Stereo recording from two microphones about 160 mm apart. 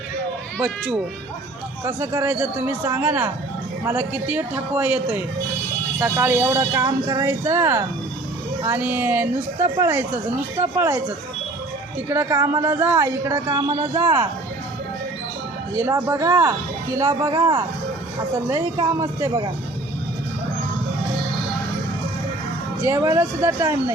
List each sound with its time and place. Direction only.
1.8 s speech: 20° right (ahead or behind)
12.0 s speech: 15° right (ahead or behind)
15.8 s speech: 20° right (ahead or behind)
18.8 s speech: 20° right (ahead or behind)
22.8 s speech: 20° right (ahead or behind)